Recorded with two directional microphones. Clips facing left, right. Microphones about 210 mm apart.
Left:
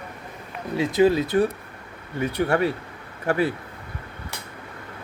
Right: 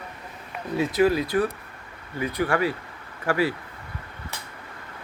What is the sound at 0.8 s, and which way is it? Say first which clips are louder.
Speech: left 2 dB; 25° left (ahead or behind).